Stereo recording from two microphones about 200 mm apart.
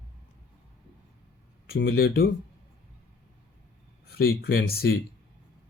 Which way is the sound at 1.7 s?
50° left (ahead or behind).